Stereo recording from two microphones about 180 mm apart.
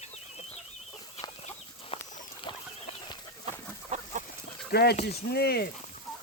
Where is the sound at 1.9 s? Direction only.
30° left (ahead or behind).